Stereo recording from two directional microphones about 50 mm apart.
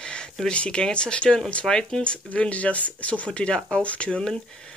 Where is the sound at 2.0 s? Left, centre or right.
Left.